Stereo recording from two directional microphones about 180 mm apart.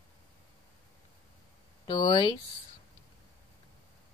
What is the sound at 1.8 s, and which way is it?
Speech, 25° left (ahead or behind).